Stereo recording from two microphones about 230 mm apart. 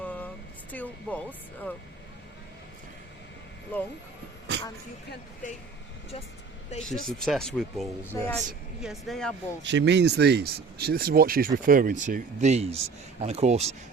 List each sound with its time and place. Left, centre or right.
0.0 s a sound: centre
0.7 s speech: centre
6.8 s speech: centre
9.6 s speech: right